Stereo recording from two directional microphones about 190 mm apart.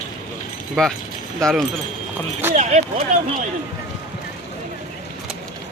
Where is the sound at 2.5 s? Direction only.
35° right (ahead or behind).